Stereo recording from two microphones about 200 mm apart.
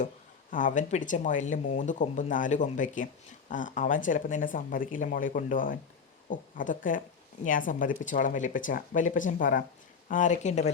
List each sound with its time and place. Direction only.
0.5 s speech: 40° left (ahead or behind)